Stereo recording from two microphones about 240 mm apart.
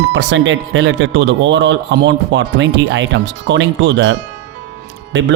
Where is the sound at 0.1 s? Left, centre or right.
Right.